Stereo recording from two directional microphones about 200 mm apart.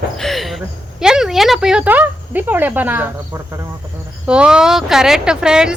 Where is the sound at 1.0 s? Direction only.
5° right (ahead or behind).